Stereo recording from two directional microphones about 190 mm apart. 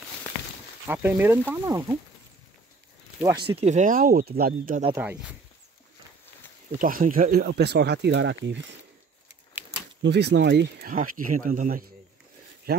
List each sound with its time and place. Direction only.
0.8 s speech: 10° right (ahead or behind)
3.2 s speech: 20° right (ahead or behind); by 4.8 s 50° right (ahead or behind)
4.9 s speech: 10° right (ahead or behind)
6.8 s speech: 45° right (ahead or behind); by 8.7 s 70° right (ahead or behind)
10.0 s speech: 65° right (ahead or behind)